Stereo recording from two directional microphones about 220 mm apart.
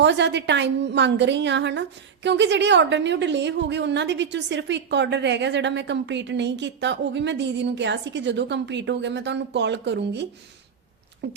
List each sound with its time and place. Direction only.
0.0 s a woman's voice: 50° right (ahead or behind)